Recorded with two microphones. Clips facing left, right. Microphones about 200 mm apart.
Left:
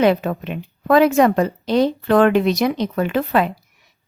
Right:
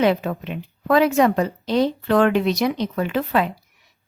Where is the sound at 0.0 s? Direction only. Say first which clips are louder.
Left 3 dB; 55° left (ahead or behind).